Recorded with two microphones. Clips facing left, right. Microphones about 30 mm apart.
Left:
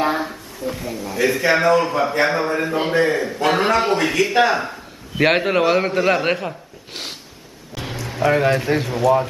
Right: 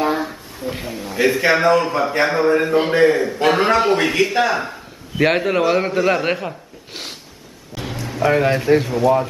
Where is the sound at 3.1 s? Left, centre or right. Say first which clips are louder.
Right 3 dB; centre.